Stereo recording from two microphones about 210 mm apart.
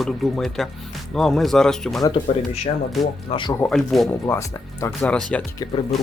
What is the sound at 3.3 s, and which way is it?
Speech, 20° left (ahead or behind).